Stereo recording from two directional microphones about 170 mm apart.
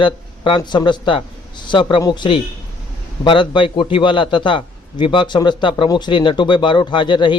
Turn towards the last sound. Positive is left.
turn(degrees=30)  # may be behind; listen again after turning